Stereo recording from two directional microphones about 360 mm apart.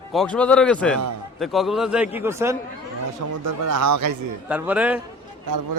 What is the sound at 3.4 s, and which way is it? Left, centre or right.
Speech, right.